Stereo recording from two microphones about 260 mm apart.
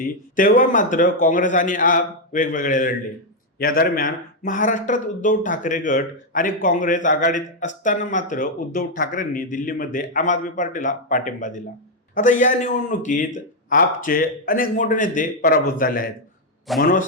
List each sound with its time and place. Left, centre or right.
0.0 s speech: left